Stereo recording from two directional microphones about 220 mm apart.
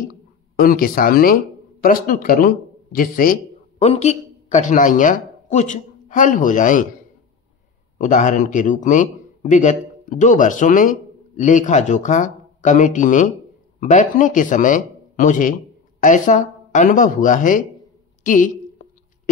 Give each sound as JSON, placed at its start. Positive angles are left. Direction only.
{"t": 0.6, "sound": "speech", "side_deg": 40}
{"t": 3.8, "sound": "speech", "side_deg": 30}
{"t": 8.0, "sound": "a man's voice", "side_deg": 35}
{"t": 18.2, "sound": "a sound", "side_deg": 35}